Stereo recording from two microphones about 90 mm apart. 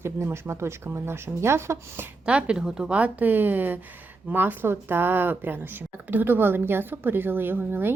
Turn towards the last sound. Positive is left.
turn(degrees=-25)  # may be behind; listen again after turning